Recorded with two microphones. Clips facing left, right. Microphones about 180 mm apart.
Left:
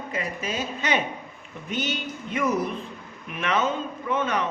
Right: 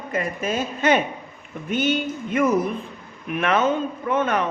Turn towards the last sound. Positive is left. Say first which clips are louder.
# right 4 dB
turn(degrees=-55)  # may be behind; listen again after turning